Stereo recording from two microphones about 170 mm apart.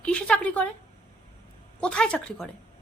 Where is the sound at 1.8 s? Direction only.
5° left (ahead or behind).